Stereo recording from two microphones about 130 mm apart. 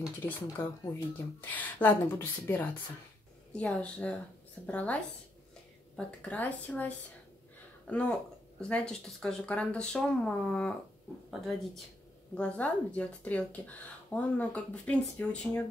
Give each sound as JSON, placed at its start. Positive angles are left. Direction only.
{"t": 0.2, "sound": "speech", "side_deg": 15}